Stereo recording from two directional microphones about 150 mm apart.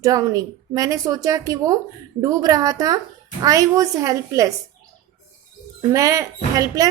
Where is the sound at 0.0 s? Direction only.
20° right (ahead or behind).